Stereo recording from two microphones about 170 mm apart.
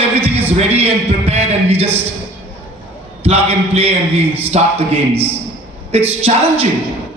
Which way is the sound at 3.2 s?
35° right (ahead or behind).